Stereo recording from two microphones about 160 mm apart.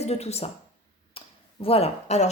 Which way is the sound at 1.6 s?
40° left (ahead or behind).